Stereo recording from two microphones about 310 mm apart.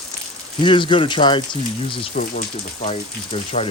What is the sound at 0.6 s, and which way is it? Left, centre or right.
Speech, centre.